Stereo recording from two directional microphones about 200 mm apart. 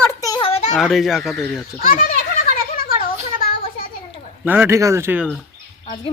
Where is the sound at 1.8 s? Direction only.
45° left (ahead or behind).